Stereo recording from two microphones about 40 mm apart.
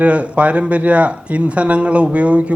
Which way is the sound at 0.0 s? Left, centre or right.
Right.